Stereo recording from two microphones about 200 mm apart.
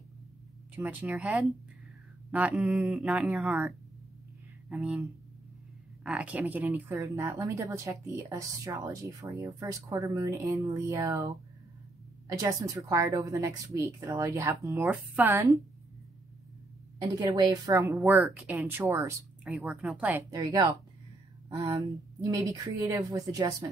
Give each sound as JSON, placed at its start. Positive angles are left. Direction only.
{"t": 0.7, "sound": "speech", "side_deg": -5}
{"t": 4.6, "sound": "speech", "side_deg": 0}
{"t": 6.0, "sound": "speech", "side_deg": -5}
{"t": 17.2, "sound": "speech", "side_deg": -20}
{"t": 17.8, "sound": "speech", "side_deg": -5}